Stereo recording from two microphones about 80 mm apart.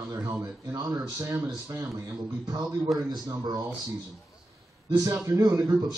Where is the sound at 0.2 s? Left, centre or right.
Right.